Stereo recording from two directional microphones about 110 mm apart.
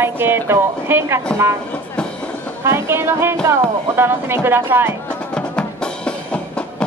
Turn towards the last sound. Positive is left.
turn(degrees=10)  # may be behind; listen again after turning